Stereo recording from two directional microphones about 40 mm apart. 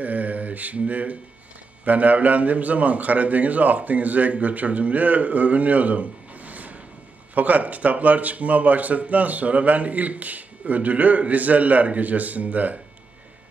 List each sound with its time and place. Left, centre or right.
0.0 s mantra: right
1.9 s speech: right